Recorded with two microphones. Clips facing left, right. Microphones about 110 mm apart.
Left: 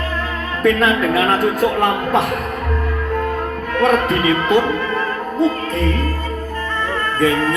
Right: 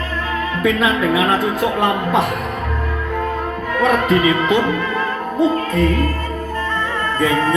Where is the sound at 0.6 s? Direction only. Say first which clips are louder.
Left 2 dB; 10° right (ahead or behind).